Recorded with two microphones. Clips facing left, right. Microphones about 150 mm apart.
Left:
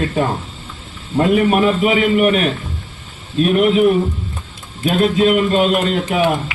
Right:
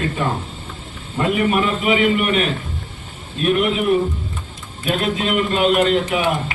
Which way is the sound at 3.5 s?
45° left (ahead or behind).